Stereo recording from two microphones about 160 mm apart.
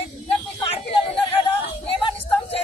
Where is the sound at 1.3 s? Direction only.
35° left (ahead or behind).